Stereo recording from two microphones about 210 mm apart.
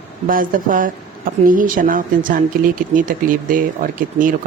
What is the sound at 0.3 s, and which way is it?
A woman's voice, 40° right (ahead or behind).